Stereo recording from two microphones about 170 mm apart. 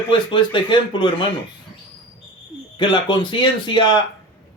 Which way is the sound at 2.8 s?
25° left (ahead or behind).